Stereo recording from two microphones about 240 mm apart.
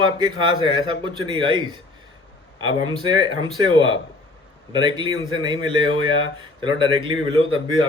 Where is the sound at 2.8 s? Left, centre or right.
Centre.